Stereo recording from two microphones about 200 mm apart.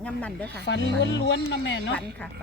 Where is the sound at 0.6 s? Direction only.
65° left (ahead or behind).